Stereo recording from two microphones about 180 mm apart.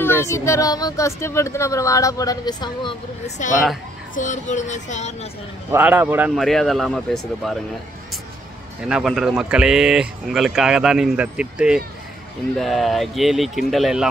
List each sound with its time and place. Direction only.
0.0 s speech: 15° left (ahead or behind)
3.3 s speech: 40° left (ahead or behind)
5.7 s a man's voice: 10° right (ahead or behind)
6.3 s speech: centre (ahead or behind)
8.8 s speech: 5° right (ahead or behind)